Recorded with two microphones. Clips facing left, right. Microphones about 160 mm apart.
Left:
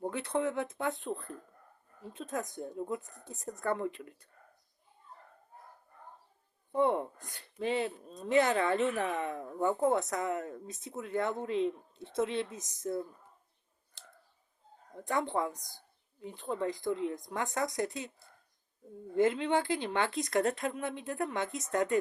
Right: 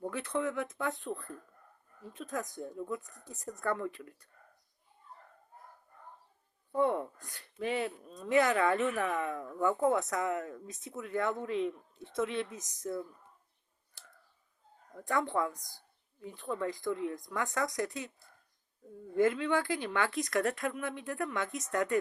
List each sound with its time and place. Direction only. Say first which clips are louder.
0.1 s speech: left 1 dB; 25° left (ahead or behind)
6.7 s speech: left 1 dB; 25° left (ahead or behind)
14.0 s clicking: left 2 dB; 25° left (ahead or behind)
14.9 s speech: even; 25° left (ahead or behind)